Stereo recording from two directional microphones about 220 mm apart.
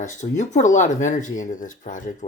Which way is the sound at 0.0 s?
35° left (ahead or behind).